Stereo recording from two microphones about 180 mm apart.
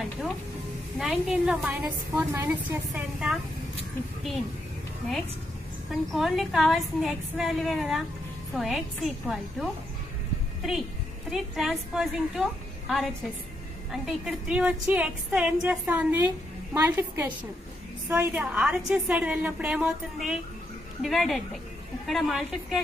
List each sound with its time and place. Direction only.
0.9 s a woman's voice: 5° right (ahead or behind)
5.9 s a woman's voice: centre (ahead or behind)
11.2 s a woman's voice: centre (ahead or behind)